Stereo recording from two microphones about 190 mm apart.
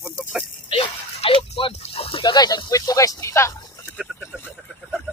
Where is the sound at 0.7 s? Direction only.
30° left (ahead or behind); by 3.9 s 15° left (ahead or behind).